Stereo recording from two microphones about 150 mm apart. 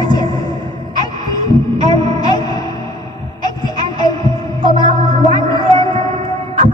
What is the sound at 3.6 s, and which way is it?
Hum, 25° left (ahead or behind).